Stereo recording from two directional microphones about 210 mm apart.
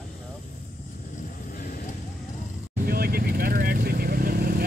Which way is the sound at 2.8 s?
45° right (ahead or behind).